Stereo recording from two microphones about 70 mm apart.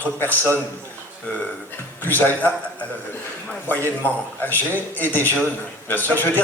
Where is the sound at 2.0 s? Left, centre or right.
Left.